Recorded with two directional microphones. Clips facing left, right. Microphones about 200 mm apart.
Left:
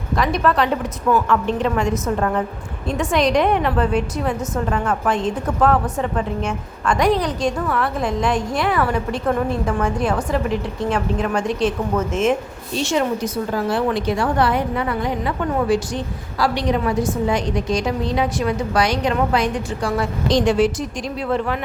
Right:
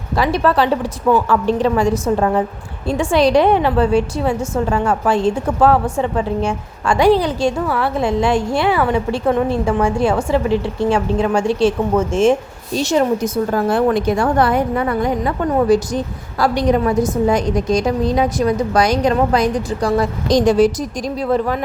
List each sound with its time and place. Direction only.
0.2 s a woman's voice: 30° right (ahead or behind)